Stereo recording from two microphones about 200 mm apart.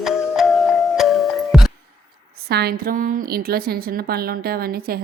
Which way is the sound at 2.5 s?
55° right (ahead or behind).